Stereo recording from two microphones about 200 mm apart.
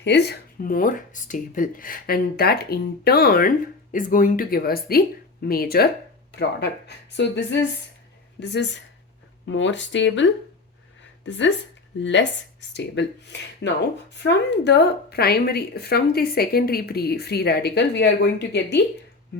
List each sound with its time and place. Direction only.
0.0 s speech: 55° left (ahead or behind)
11.3 s speech: 65° left (ahead or behind)